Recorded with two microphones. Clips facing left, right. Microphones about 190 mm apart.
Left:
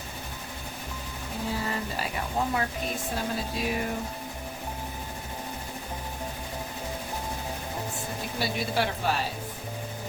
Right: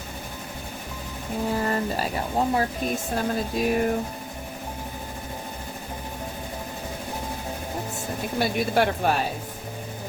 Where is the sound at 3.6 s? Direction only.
50° right (ahead or behind).